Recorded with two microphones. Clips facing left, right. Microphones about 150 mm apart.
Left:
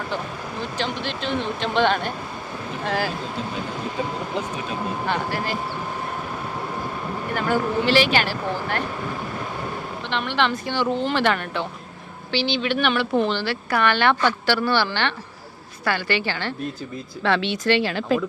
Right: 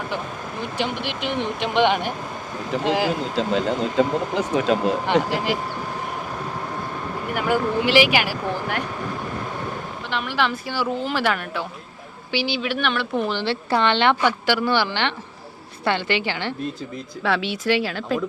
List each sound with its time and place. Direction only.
0.6 s speech: 15° right (ahead or behind)
3.3 s speech: 90° right
5.0 s speech: 15° right (ahead or behind)
7.3 s speech: 10° right (ahead or behind)
10.1 s speech: 5° right (ahead or behind)
13.3 s speech: 25° right (ahead or behind); by 18.2 s centre (ahead or behind)